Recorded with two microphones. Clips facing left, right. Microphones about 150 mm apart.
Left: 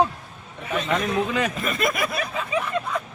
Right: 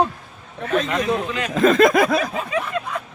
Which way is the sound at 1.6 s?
90° right.